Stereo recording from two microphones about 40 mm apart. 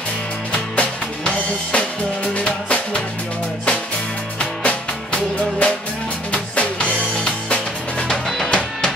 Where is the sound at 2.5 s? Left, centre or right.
Left.